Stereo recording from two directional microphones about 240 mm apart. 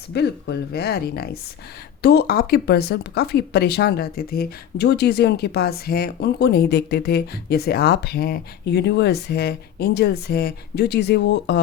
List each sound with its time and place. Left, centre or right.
0.1 s speech: left